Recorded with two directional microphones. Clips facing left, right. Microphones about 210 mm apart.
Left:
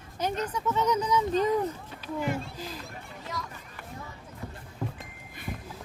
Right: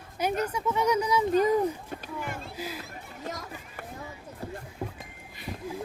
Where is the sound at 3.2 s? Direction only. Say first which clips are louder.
Right 2 dB; 45° right (ahead or behind).